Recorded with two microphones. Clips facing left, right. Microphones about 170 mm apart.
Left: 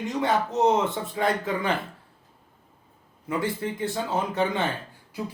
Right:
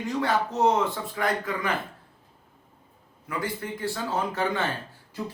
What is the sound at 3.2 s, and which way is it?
A man's voice, 25° left (ahead or behind).